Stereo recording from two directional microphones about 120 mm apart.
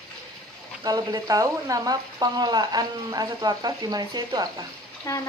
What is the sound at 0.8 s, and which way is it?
Speech, 30° right (ahead or behind).